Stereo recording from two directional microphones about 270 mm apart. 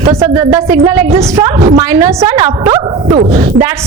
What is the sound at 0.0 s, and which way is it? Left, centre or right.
A woman's voice, right.